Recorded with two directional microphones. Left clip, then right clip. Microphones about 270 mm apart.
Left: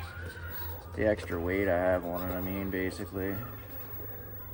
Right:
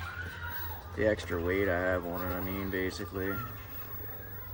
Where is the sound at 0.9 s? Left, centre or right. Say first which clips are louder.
Even; centre.